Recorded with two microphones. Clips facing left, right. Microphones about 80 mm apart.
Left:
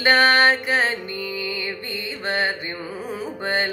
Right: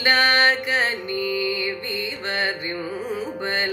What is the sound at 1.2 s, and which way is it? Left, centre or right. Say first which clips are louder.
Mantra: right 4 dB; left.